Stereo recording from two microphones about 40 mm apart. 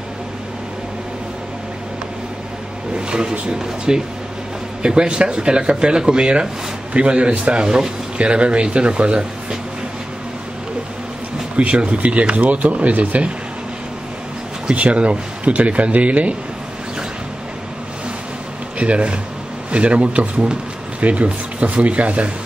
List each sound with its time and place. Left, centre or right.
3.1 s speech: right
11.5 s speech: right
14.7 s speech: right
18.8 s speech: right